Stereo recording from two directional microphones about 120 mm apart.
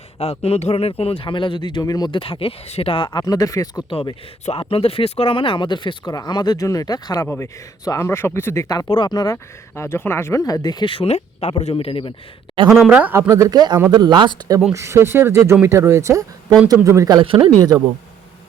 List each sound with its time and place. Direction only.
0.2 s speech: 60° left (ahead or behind); by 3.8 s 30° left (ahead or behind)
4.6 s speech: 50° left (ahead or behind); by 8.9 s 30° left (ahead or behind)
8.9 s speech: 40° left (ahead or behind)
12.8 s speech: 10° right (ahead or behind)
13.1 s speech: 25° right (ahead or behind)
14.7 s speech: 25° right (ahead or behind)
17.2 s speech: 45° right (ahead or behind)